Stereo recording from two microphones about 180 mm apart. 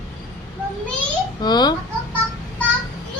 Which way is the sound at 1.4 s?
25° left (ahead or behind).